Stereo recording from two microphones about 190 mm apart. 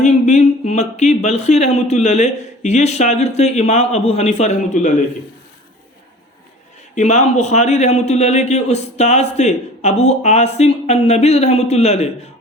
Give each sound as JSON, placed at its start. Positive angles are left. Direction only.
{"t": 0.0, "sound": "a man's voice", "side_deg": 35}
{"t": 6.9, "sound": "a man's voice", "side_deg": 40}